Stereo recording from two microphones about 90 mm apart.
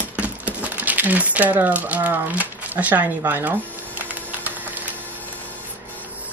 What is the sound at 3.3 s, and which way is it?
Mechanisms, 20° right (ahead or behind).